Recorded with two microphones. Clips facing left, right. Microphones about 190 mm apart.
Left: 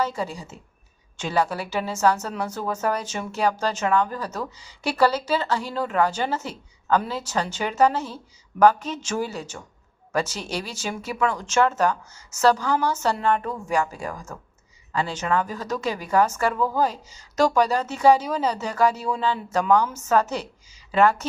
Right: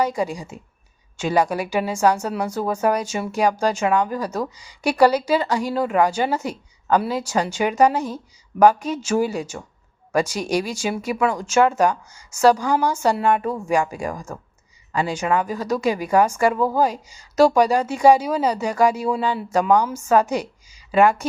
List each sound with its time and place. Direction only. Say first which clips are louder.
0.0 s a woman's voice: right 4 dB; 15° right (ahead or behind)